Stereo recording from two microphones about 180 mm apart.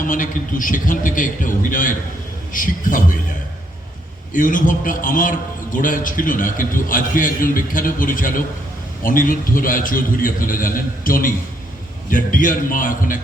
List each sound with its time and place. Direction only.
0.0 s a man's voice: 45° left (ahead or behind)
4.3 s a man's voice: 45° left (ahead or behind)